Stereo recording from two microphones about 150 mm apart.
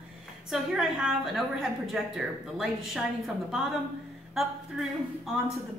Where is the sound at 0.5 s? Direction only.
5° right (ahead or behind).